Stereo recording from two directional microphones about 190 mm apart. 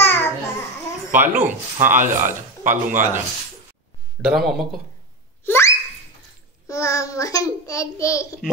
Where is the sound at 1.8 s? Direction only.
40° right (ahead or behind).